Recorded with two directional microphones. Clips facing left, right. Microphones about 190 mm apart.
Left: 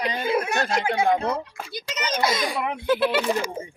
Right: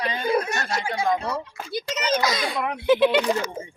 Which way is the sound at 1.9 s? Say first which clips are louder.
Even; 25° left (ahead or behind).